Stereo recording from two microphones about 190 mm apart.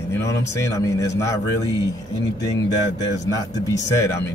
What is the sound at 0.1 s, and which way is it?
A man's voice, 15° left (ahead or behind).